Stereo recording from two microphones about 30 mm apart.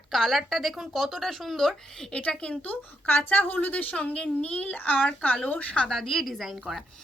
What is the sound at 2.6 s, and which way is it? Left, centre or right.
Speech, left.